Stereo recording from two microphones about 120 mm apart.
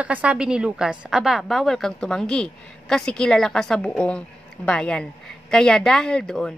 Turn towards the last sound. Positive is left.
turn(degrees=5)  # may be behind; listen again after turning